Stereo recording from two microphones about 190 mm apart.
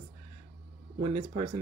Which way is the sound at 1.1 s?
30° right (ahead or behind).